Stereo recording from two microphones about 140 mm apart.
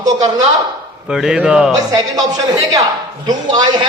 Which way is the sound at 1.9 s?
25° right (ahead or behind).